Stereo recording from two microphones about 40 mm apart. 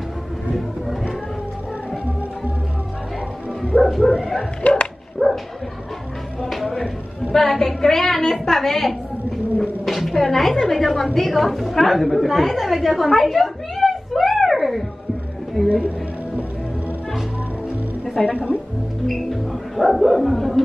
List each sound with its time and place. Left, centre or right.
3.8 s bow-wow: centre
4.6 s dog: left
5.2 s dog: right
6.4 s a sound: centre
7.3 s a woman's voice: centre
15.6 s a woman's voice: centre
18.3 s speech: right
19.8 s speech: centre